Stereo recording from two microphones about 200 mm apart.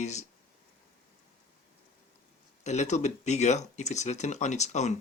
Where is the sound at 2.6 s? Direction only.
35° left (ahead or behind).